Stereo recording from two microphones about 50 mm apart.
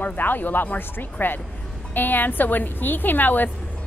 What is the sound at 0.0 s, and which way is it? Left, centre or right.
Speech, left.